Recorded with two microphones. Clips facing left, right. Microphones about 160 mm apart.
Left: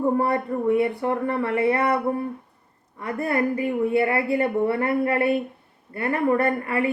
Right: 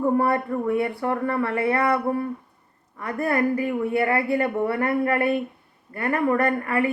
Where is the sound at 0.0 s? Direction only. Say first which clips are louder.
Right 1 dB; 20° left (ahead or behind).